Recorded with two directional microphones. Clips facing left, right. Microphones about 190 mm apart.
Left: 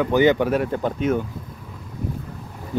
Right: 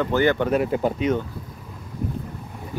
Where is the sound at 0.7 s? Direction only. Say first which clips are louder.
Right 1 dB; 10° right (ahead or behind).